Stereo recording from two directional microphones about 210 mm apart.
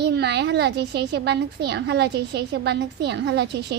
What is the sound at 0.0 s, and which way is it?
A woman's voice, 50° right (ahead or behind).